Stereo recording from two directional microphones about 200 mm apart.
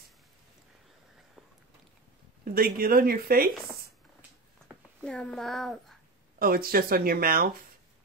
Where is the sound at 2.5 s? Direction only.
45° right (ahead or behind).